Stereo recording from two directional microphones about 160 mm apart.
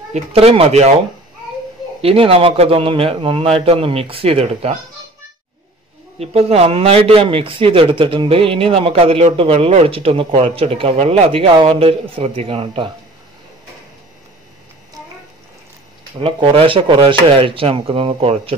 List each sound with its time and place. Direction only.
0.1 s a man's voice: 40° right (ahead or behind)
2.0 s a man's voice: 35° right (ahead or behind)
6.1 s a man's voice: 40° right (ahead or behind)
16.2 s a man's voice: 35° right (ahead or behind)